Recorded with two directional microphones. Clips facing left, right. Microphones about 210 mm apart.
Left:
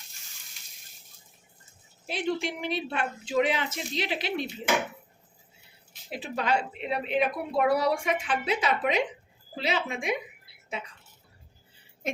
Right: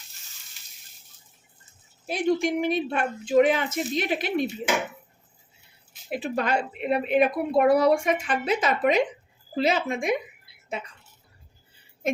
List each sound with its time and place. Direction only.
2.0 s a woman's voice: 45° right (ahead or behind)
6.1 s a woman's voice: 50° right (ahead or behind)